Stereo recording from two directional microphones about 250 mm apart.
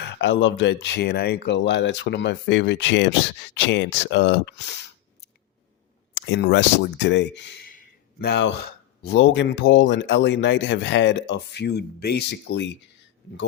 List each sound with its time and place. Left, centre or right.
0.0 s speech: left
6.1 s speech: left